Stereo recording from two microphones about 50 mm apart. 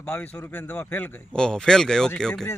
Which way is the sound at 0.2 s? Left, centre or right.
Left.